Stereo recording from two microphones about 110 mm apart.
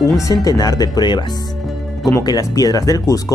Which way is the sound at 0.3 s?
35° left (ahead or behind).